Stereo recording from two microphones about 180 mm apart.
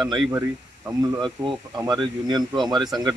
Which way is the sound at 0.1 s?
15° right (ahead or behind).